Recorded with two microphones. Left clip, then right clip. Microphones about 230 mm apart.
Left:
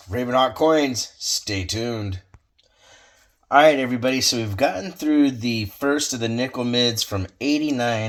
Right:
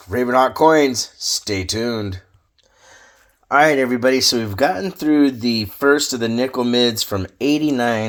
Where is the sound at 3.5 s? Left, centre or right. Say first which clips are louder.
Right 1 dB; right.